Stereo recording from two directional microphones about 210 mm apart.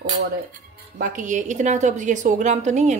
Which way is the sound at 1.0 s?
40° right (ahead or behind).